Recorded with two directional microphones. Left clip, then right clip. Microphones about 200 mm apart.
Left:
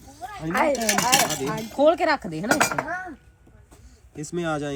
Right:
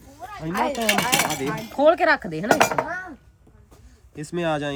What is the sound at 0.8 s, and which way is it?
Speech, 15° right (ahead or behind).